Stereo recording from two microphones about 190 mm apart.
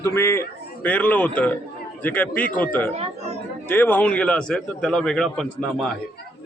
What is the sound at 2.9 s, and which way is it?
Speech, 35° right (ahead or behind).